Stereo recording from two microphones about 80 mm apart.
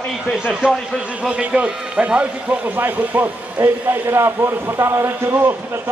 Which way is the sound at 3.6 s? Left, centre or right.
Right.